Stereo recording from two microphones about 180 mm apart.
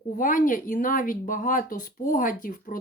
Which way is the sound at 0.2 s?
50° left (ahead or behind).